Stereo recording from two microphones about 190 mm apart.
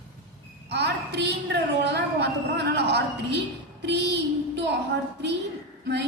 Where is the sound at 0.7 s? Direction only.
65° right (ahead or behind).